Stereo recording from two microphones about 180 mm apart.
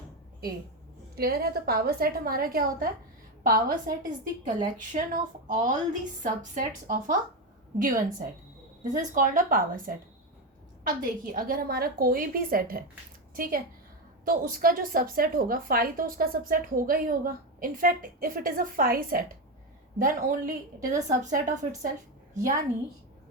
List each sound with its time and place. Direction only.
1.1 s a woman's voice: 60° right (ahead or behind)
9.1 s a woman's voice: 50° right (ahead or behind)